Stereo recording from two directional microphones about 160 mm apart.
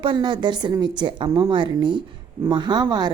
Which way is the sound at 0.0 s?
30° right (ahead or behind).